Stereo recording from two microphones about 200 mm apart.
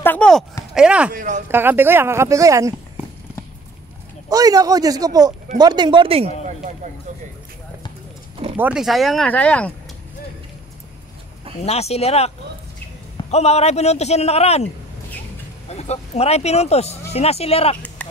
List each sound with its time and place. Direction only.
0.0 s speech: 5° left (ahead or behind)
1.1 s speech: 40° right (ahead or behind)
1.5 s speech: 10° right (ahead or behind)
4.3 s speech: 20° right (ahead or behind); by 6.9 s 35° right (ahead or behind)
8.5 s speech: 5° right (ahead or behind)
11.6 s a man's voice: 30° left (ahead or behind)
13.3 s a man's voice: 30° left (ahead or behind)
15.7 s a man's voice: 35° left (ahead or behind)